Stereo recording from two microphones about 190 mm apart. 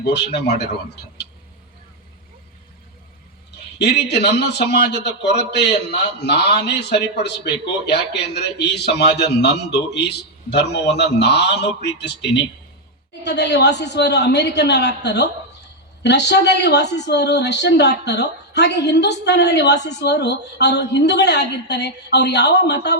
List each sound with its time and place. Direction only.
0.0 s speech: 60° left (ahead or behind)
3.8 s speech: 60° left (ahead or behind)